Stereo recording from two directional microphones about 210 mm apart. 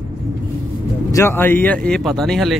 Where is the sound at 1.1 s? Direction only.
10° left (ahead or behind).